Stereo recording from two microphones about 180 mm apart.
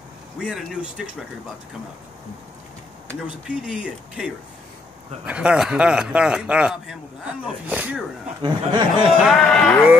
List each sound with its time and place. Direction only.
0.4 s a man's voice: centre (ahead or behind)
3.4 s a man's voice: 5° right (ahead or behind)
8.4 s speech: 25° right (ahead or behind)
9.2 s a man's voice: centre (ahead or behind)